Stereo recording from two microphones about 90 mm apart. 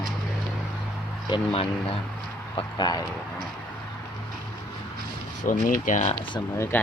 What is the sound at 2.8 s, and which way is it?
Speech, 50° left (ahead or behind).